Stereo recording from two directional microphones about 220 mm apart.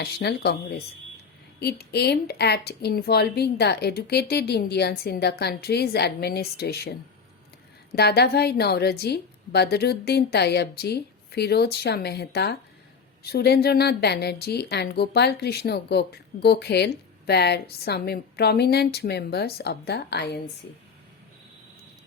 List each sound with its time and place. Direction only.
0.0 s a woman's voice: 50° left (ahead or behind)
7.9 s a woman's voice: 45° left (ahead or behind)